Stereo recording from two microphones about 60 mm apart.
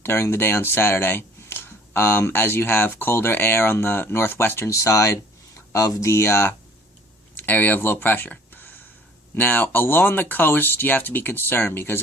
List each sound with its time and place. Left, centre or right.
0.0 s speech: left
4.7 s speech: left
7.3 s speech: left